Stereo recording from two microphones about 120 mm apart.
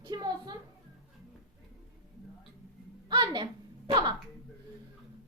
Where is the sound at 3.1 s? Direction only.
40° right (ahead or behind).